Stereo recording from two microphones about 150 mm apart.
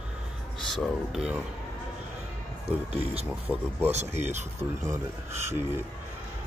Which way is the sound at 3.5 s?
10° left (ahead or behind).